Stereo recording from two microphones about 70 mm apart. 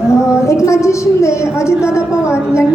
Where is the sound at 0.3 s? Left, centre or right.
Left.